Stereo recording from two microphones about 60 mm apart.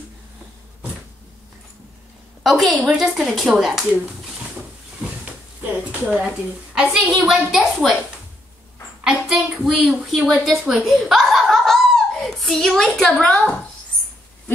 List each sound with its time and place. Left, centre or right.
2.4 s speech: centre
5.6 s a sound: right
6.7 s a woman's voice: centre
9.0 s a child's voice: centre
9.8 s speech: centre
10.8 s a sound: centre